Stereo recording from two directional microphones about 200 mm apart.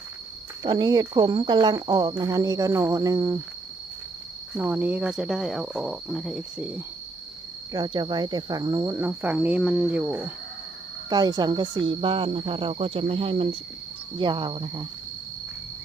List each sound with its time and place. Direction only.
0.6 s speech: 20° right (ahead or behind)
4.5 s speech: 10° right (ahead or behind)
7.7 s speech: 20° right (ahead or behind)
11.1 s speech: 20° right (ahead or behind)